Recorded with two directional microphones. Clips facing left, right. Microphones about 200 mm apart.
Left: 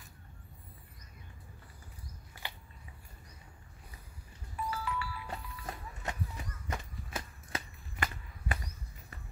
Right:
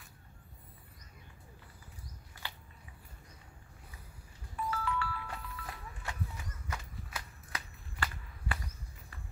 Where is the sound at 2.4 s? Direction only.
15° left (ahead or behind).